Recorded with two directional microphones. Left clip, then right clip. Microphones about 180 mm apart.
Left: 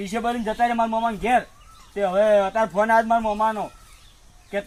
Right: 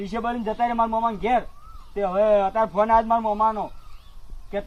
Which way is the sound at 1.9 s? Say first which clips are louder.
Left 1 dB; 30° left (ahead or behind).